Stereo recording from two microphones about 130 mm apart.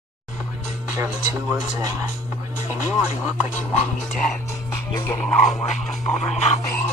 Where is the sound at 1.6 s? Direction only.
30° right (ahead or behind).